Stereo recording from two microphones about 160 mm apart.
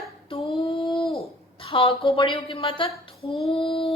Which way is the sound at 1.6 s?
35° left (ahead or behind).